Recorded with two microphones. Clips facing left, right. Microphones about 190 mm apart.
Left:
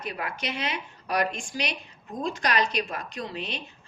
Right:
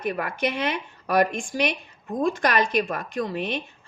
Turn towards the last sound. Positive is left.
turn(degrees=-55)  # may be behind; listen again after turning